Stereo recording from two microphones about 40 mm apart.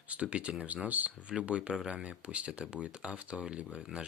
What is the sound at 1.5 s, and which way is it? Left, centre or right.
Speech, right.